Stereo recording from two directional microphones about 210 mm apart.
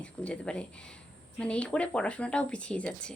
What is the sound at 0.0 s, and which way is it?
A woman's voice, 5° left (ahead or behind).